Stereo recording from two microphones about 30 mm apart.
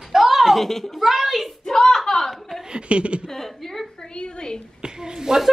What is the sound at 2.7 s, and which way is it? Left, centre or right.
Speech, right.